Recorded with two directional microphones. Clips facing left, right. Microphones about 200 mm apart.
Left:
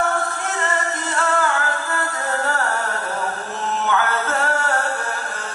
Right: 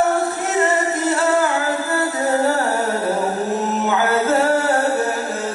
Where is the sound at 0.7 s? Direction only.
5° right (ahead or behind).